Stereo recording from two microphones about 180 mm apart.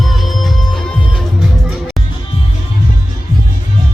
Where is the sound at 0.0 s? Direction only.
Centre (ahead or behind).